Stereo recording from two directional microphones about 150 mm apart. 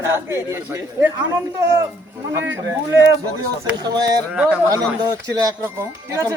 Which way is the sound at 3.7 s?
30° right (ahead or behind).